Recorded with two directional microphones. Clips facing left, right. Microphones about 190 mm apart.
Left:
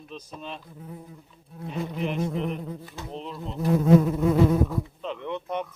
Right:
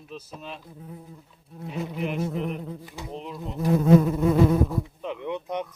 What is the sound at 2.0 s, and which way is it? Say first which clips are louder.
Speech: even; 5° right (ahead or behind).